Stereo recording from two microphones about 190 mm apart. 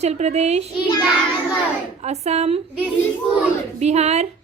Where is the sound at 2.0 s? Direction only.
35° right (ahead or behind).